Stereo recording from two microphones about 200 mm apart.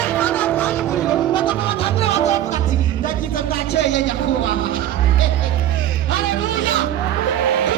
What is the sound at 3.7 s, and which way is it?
Speech, 60° left (ahead or behind).